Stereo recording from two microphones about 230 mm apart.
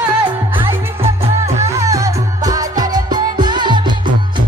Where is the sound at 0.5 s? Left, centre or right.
Right.